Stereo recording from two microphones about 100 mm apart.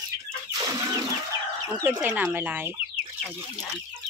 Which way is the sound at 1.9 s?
15° right (ahead or behind).